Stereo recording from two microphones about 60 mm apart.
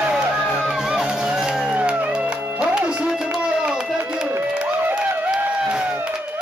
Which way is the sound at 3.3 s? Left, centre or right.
Centre.